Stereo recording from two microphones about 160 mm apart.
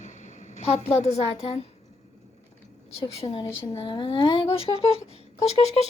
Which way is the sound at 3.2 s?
30° left (ahead or behind).